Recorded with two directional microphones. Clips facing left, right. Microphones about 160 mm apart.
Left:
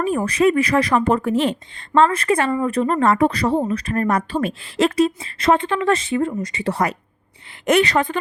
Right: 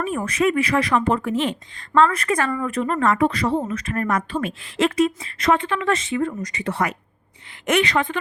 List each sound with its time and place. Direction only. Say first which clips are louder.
0.0 s speech: left 4 dB; 35° left (ahead or behind)
1.9 s speech: left 2 dB; 30° left (ahead or behind)
2.6 s speech: left 3 dB; 35° left (ahead or behind)